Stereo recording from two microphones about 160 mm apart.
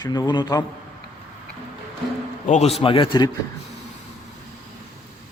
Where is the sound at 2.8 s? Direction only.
35° left (ahead or behind).